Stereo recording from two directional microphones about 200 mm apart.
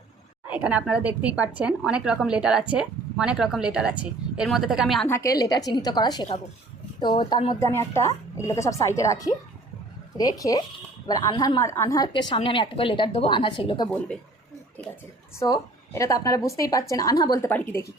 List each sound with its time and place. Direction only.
0.4 s speech: 5° right (ahead or behind)
5.0 s a woman's voice: 15° left (ahead or behind)
14.8 s a sound: 10° left (ahead or behind)
15.4 s a woman's voice: 15° left (ahead or behind)